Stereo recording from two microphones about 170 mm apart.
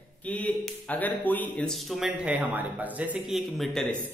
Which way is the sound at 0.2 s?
10° left (ahead or behind).